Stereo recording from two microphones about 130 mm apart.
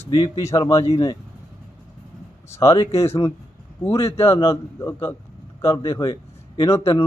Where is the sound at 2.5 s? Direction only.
25° left (ahead or behind).